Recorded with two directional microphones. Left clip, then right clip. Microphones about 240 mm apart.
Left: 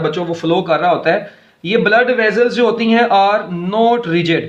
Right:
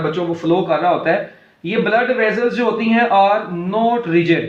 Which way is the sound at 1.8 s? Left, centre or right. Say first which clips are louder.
Left 3 dB; left.